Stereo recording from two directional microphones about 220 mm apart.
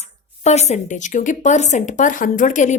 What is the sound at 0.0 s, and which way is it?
Speech, 30° left (ahead or behind).